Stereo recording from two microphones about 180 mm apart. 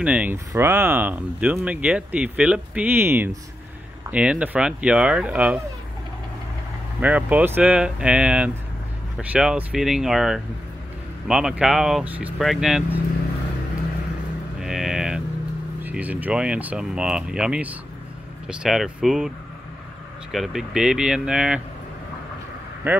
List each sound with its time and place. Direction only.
0.0 s speech: 10° right (ahead or behind)
7.0 s speech: 10° right (ahead or behind)
14.6 s music: centre (ahead or behind)
15.8 s speech: 10° right (ahead or behind)
22.8 s speech: 10° right (ahead or behind)